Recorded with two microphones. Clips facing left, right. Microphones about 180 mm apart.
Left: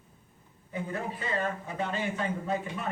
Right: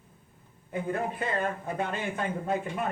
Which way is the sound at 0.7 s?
55° right (ahead or behind).